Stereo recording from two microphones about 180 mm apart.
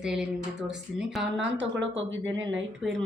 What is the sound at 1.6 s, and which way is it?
Speech, 90° right.